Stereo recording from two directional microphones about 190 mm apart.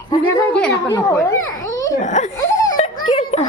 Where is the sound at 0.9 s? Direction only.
15° left (ahead or behind).